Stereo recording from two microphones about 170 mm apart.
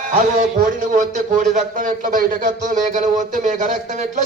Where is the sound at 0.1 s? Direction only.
45° right (ahead or behind).